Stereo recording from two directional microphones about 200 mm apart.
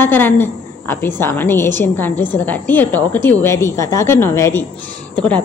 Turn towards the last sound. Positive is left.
turn(degrees=5)  # may be behind; listen again after turning